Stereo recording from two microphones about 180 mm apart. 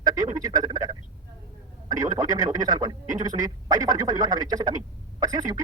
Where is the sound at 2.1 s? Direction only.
20° right (ahead or behind).